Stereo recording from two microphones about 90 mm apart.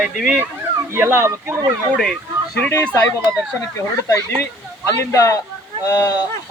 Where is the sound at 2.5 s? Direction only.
20° left (ahead or behind).